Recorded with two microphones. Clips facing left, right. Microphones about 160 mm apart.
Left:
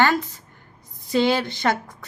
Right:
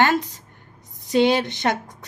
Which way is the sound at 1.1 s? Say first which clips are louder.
Right 2 dB; 20° right (ahead or behind).